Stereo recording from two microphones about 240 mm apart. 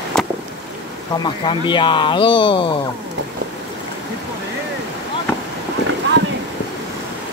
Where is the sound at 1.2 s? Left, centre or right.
Centre.